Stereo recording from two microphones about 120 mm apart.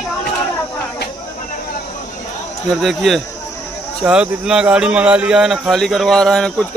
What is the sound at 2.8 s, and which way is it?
Speech, centre (ahead or behind).